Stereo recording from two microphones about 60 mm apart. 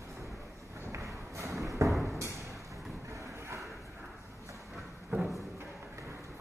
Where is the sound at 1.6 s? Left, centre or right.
Right.